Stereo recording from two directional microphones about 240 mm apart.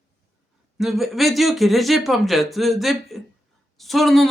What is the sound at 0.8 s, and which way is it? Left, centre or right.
Speech, centre.